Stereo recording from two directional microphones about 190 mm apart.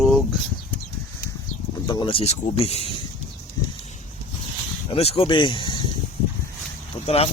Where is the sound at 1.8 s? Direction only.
25° left (ahead or behind).